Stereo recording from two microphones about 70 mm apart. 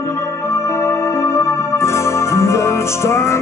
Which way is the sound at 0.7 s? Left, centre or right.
Left.